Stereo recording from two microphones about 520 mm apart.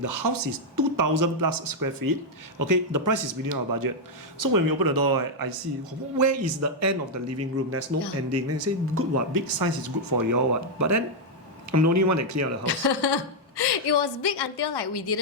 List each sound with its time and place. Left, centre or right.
0.0 s speech: right
12.6 s a woman's voice: left